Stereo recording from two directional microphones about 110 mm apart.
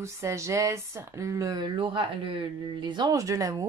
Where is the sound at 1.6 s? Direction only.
50° right (ahead or behind).